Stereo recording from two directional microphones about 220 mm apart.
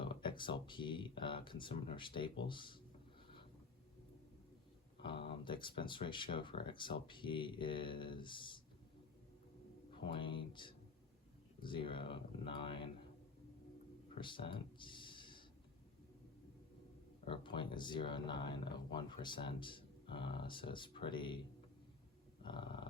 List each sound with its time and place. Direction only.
0.0 s speech: 20° left (ahead or behind)
5.0 s speech: 25° left (ahead or behind)
10.1 s speech: 20° left (ahead or behind)
14.2 s a sound: 20° left (ahead or behind)
17.2 s speech: 20° left (ahead or behind)
22.4 s dog: 20° left (ahead or behind)